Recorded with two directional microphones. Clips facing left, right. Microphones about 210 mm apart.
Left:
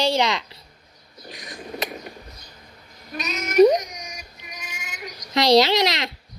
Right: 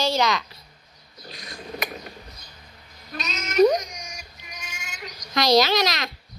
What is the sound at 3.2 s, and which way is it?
Synthetic singing, 15° left (ahead or behind).